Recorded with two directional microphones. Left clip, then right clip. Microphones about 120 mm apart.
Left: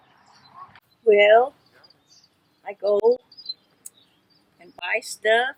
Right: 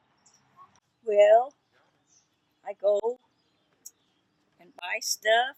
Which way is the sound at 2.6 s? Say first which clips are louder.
Left 3 dB; 30° right (ahead or behind).